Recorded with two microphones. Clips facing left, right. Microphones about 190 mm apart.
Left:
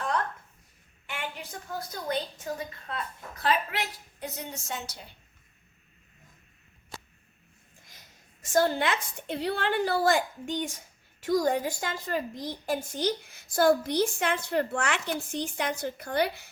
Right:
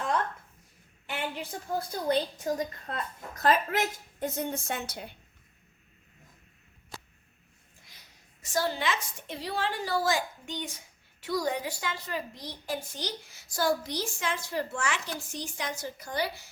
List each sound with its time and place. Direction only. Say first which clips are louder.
1.4 s a woman's voice: right 4 dB; 30° right (ahead or behind); by 5.1 s 55° right (ahead or behind)
8.4 s a woman's voice: left 5 dB; 50° left (ahead or behind)